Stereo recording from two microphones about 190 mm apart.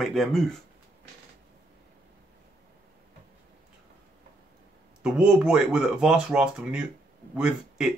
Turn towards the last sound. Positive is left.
turn(degrees=-5)  # may be behind; listen again after turning